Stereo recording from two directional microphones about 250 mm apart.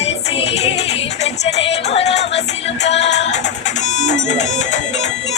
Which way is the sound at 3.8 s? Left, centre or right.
Left.